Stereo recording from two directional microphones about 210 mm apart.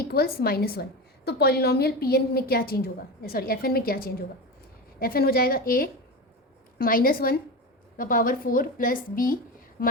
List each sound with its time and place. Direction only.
0.1 s a woman's voice: 45° left (ahead or behind)